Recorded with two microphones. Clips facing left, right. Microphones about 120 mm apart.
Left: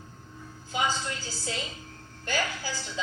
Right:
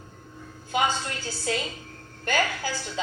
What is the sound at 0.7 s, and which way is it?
A woman's voice, 60° right (ahead or behind).